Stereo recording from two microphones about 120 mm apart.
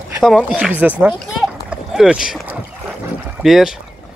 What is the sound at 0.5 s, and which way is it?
Speech, 10° right (ahead or behind).